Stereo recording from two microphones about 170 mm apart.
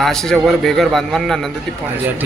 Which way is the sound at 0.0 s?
5° left (ahead or behind).